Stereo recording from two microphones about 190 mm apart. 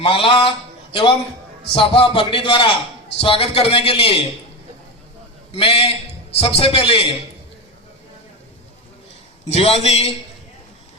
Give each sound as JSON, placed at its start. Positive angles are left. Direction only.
{"t": 0.0, "sound": "a man's voice", "side_deg": 30}
{"t": 1.7, "sound": "a man's voice", "side_deg": 30}
{"t": 5.5, "sound": "a man's voice", "side_deg": 30}
{"t": 9.5, "sound": "a man's voice", "side_deg": 30}